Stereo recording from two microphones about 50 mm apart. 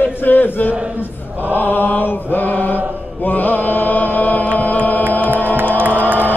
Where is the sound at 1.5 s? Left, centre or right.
Left.